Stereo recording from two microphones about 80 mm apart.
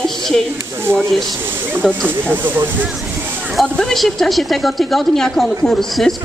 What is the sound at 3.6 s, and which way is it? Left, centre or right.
Speech, centre.